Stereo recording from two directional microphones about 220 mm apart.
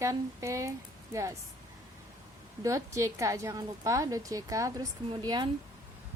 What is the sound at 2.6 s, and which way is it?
A woman's voice, 15° right (ahead or behind).